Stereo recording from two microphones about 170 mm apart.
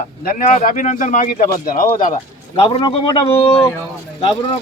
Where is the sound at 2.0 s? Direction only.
40° left (ahead or behind).